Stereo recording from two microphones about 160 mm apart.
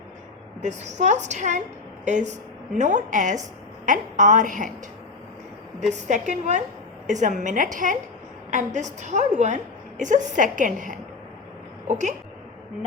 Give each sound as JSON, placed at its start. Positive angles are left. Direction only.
{"t": 0.6, "sound": "a woman's voice", "side_deg": -45}
{"t": 5.9, "sound": "a woman's voice", "side_deg": -50}